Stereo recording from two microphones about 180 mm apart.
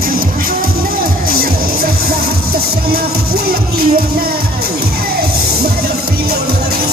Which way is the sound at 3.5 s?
55° right (ahead or behind).